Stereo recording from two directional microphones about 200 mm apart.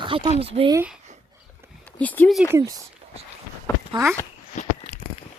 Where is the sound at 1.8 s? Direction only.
10° left (ahead or behind).